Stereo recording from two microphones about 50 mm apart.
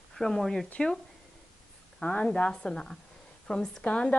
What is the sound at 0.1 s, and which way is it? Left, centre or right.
Speech, centre.